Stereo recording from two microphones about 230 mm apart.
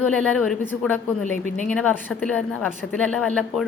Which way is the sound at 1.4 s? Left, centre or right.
Right.